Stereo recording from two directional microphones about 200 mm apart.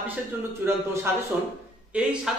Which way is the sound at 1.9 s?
5° right (ahead or behind).